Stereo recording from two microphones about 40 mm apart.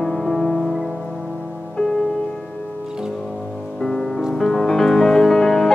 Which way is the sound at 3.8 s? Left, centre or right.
Centre.